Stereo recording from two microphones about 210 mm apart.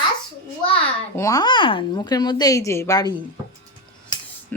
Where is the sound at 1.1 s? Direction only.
15° left (ahead or behind).